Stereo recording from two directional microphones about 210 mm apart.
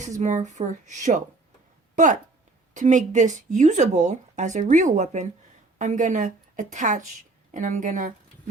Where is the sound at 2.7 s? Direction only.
35° right (ahead or behind).